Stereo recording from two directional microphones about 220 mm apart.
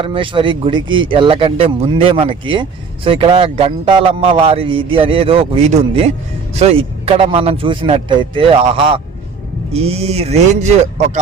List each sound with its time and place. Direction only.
0.0 s speech: 25° right (ahead or behind)